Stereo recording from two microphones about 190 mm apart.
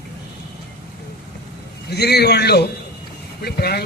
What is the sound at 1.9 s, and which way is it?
A man's voice, 60° left (ahead or behind).